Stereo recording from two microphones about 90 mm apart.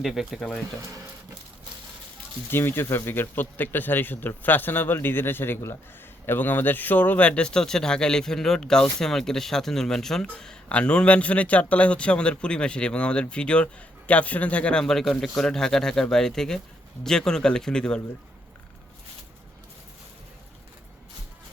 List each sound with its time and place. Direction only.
0.0 s speech: centre (ahead or behind)
2.5 s speech: 25° left (ahead or behind); by 18.0 s 10° left (ahead or behind)